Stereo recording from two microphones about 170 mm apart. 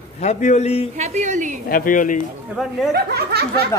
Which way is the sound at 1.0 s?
40° right (ahead or behind).